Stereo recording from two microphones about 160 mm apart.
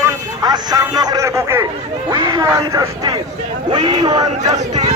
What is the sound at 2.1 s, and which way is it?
Speech, 25° right (ahead or behind).